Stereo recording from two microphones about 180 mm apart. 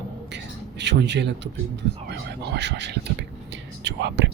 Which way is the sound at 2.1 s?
70° right (ahead or behind).